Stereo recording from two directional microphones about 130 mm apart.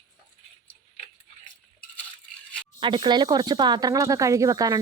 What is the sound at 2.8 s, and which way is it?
Speech, 40° right (ahead or behind).